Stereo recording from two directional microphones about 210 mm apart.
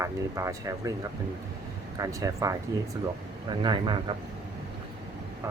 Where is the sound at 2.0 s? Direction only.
15° right (ahead or behind).